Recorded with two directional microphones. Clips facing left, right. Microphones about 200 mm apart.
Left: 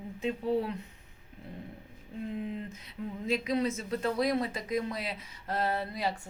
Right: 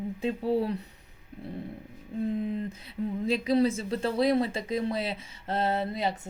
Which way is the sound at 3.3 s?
30° right (ahead or behind).